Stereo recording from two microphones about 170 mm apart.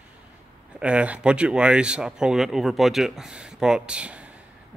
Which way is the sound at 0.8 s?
5° right (ahead or behind).